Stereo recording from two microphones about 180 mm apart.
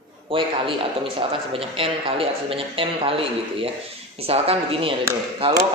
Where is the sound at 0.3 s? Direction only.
30° right (ahead or behind).